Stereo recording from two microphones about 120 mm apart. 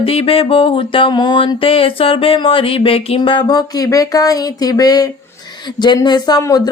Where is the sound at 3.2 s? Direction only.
40° left (ahead or behind).